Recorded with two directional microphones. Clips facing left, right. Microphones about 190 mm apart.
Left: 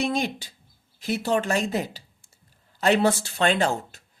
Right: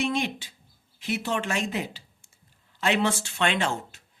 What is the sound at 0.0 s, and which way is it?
A man's voice, 35° left (ahead or behind).